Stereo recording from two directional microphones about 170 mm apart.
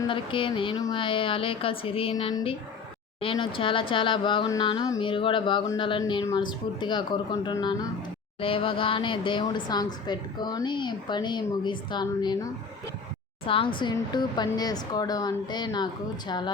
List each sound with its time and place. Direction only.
0.0 s a woman's voice: 30° left (ahead or behind)